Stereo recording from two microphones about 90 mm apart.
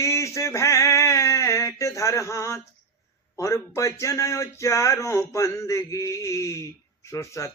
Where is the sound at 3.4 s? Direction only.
35° left (ahead or behind).